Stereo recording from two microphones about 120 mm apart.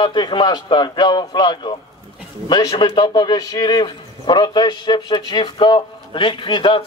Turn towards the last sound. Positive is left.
turn(degrees=40)  # may be behind; listen again after turning